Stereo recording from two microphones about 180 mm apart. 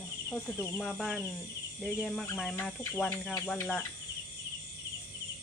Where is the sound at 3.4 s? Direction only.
15° left (ahead or behind).